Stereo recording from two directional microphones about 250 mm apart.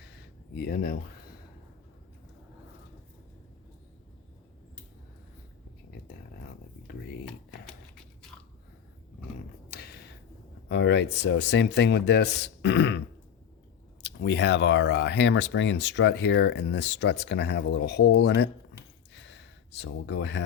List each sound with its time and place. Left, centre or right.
0.6 s speech: left
10.7 s speech: left
14.0 s speech: left
19.2 s a sound: left